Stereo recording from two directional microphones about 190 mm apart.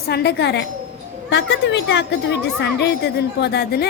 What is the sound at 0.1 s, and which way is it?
A woman's voice, 60° left (ahead or behind).